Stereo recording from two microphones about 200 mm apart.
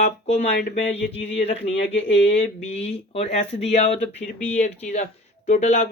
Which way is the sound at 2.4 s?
35° left (ahead or behind).